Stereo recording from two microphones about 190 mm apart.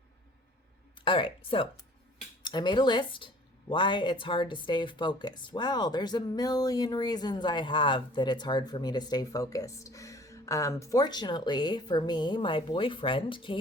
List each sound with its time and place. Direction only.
1.0 s speech: 25° left (ahead or behind)